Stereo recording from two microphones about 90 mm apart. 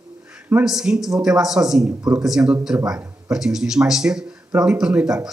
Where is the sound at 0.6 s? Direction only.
5° right (ahead or behind).